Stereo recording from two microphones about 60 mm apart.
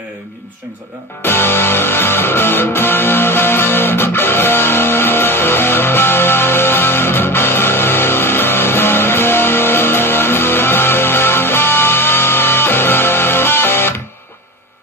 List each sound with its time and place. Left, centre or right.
1.2 s music: left